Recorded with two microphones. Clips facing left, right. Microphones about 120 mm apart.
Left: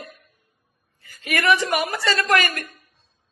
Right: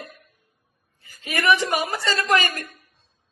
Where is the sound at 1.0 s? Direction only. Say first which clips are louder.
Left 5 dB; 60° left (ahead or behind).